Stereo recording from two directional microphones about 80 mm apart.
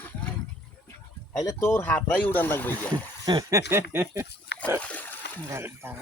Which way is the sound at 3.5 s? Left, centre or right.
Right.